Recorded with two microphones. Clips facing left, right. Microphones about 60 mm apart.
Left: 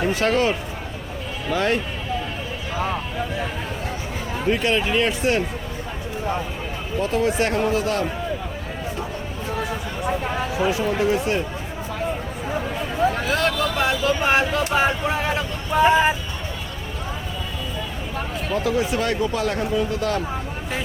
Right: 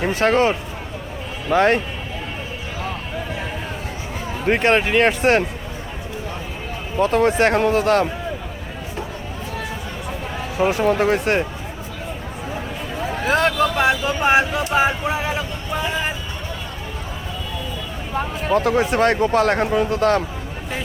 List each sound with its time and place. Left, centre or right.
0.0 s speech: right
4.4 s speech: right
7.0 s speech: right
10.6 s speech: right
13.2 s speech: right; by 15.8 s centre
18.5 s speech: right